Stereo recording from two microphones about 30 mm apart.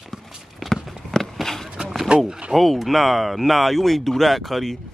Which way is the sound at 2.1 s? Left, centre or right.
Right.